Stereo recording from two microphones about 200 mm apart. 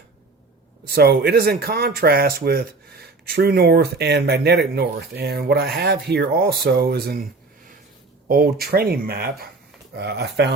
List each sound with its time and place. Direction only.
0.9 s speech: 50° right (ahead or behind)
8.3 s speech: 50° right (ahead or behind)